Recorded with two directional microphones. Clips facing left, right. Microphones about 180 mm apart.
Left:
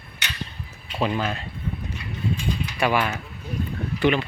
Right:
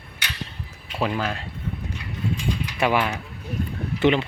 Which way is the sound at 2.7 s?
20° right (ahead or behind).